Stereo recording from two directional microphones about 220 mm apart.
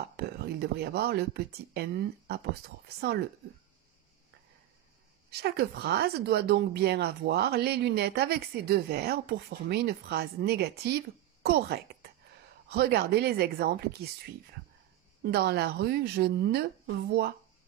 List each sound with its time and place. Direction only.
0.1 s speech: 45° right (ahead or behind)
5.3 s speech: 45° right (ahead or behind)
15.3 s speech: 45° right (ahead or behind)